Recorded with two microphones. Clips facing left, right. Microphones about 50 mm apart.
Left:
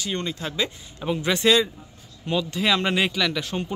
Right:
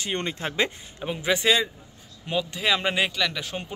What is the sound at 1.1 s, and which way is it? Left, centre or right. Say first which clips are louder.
Speech: left 2 dB; centre.